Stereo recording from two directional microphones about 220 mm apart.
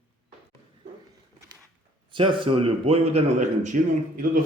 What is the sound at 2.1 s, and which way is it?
A man's voice, 20° right (ahead or behind).